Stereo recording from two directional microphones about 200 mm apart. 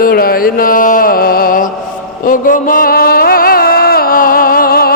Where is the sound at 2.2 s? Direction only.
45° left (ahead or behind).